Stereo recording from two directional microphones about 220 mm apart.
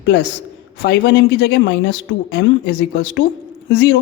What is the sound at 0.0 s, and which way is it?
A man's voice, 50° left (ahead or behind).